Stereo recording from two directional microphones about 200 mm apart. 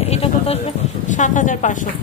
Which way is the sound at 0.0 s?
30° left (ahead or behind).